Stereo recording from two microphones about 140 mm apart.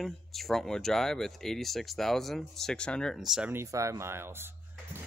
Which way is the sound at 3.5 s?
20° right (ahead or behind).